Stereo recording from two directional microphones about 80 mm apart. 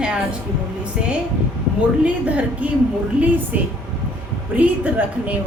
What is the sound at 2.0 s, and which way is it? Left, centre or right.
Speech, centre.